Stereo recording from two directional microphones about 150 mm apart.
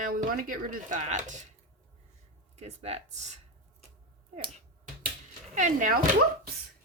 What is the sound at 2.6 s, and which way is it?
Speech, 45° right (ahead or behind).